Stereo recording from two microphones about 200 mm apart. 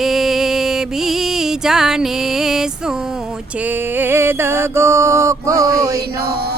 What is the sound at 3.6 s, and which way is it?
Mantra, 10° right (ahead or behind).